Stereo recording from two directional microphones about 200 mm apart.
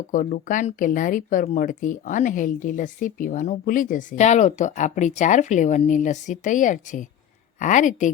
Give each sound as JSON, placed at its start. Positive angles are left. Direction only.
{"t": 0.1, "sound": "speech", "side_deg": 40}